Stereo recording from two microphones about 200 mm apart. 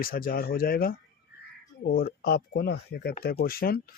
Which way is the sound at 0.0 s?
45° left (ahead or behind).